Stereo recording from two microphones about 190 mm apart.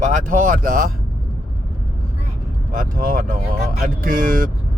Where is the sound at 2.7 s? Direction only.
45° right (ahead or behind).